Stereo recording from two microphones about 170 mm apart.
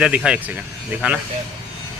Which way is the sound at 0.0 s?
5° right (ahead or behind).